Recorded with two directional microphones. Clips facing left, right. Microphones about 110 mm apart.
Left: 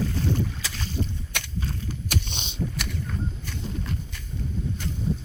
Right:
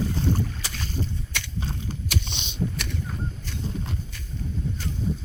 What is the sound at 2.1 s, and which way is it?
Vehicle, 45° left (ahead or behind).